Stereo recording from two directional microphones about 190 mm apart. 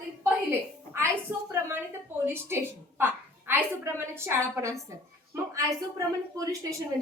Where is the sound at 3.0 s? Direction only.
10° right (ahead or behind).